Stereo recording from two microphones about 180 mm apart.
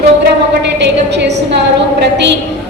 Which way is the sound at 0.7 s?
75° right (ahead or behind).